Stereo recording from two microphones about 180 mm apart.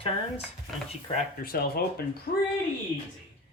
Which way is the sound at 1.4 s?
55° left (ahead or behind).